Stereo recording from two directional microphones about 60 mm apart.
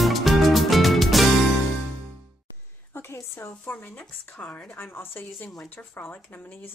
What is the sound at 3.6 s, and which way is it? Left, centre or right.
Speech, left.